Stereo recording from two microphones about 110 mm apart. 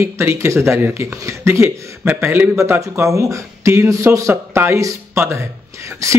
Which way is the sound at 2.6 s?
25° right (ahead or behind).